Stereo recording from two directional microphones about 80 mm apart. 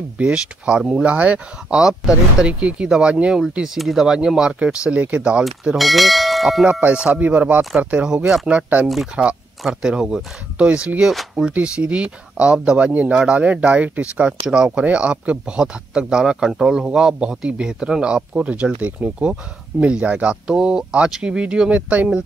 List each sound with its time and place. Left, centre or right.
0.2 s speech: centre
5.4 s bell: centre
6.7 s speech: centre
8.8 s bell: centre
9.6 s speech: centre